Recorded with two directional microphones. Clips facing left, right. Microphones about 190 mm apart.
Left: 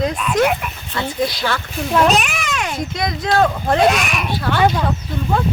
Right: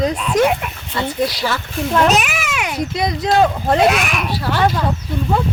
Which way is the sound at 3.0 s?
35° right (ahead or behind).